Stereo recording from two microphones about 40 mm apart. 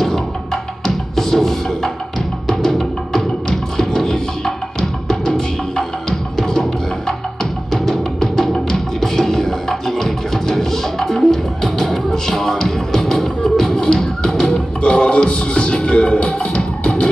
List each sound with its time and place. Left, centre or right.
0.8 s music: centre
14.8 s music: left
16.8 s music: centre